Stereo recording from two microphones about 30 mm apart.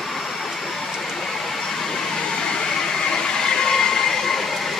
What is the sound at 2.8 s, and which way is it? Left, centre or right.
Train, left.